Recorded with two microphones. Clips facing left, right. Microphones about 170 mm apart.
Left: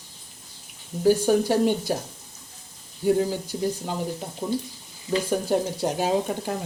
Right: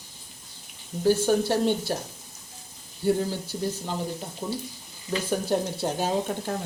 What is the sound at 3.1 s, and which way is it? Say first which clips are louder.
Speech: left 4 dB; 10° left (ahead or behind).